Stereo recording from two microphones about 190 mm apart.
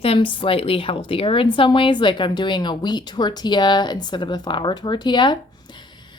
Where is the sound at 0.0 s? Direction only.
30° left (ahead or behind).